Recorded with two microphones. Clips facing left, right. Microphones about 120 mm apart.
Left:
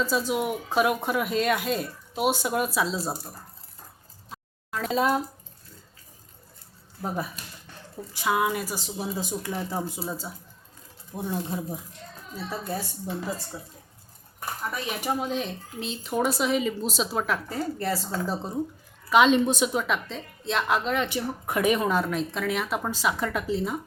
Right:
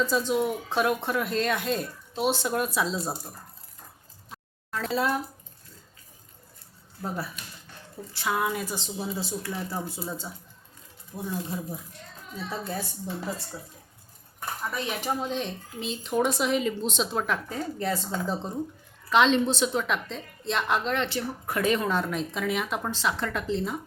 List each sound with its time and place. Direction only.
0.0 s a woman's voice: 5° left (ahead or behind)
4.3 s a sound: 5° left (ahead or behind)
4.9 s speech: 20° left (ahead or behind)
8.1 s a woman's voice: 10° left (ahead or behind)
12.5 s a woman's voice: 5° left (ahead or behind)